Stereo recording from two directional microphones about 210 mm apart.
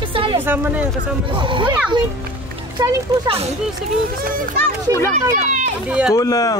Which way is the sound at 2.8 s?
25° right (ahead or behind).